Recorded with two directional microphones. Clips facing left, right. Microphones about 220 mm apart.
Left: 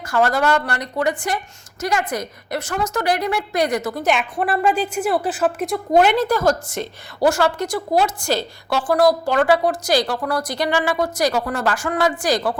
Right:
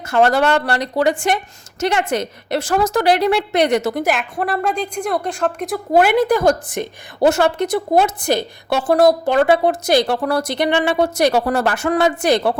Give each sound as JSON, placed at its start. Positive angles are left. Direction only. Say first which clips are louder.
{"t": 0.1, "sound": "a woman's voice", "louder": "right 3 dB", "side_deg": -30}
{"t": 1.8, "sound": "a woman's voice", "louder": "right 4 dB", "side_deg": -25}
{"t": 2.6, "sound": "speech", "louder": "right 7 dB", "side_deg": -90}
{"t": 3.2, "sound": "a woman's voice", "louder": "right 5 dB", "side_deg": -30}
{"t": 4.0, "sound": "a woman's voice", "louder": "even", "side_deg": 0}
{"t": 7.9, "sound": "a woman's voice", "louder": "right 2 dB", "side_deg": -60}
{"t": 8.3, "sound": "a woman's voice", "louder": "right 3 dB", "side_deg": -20}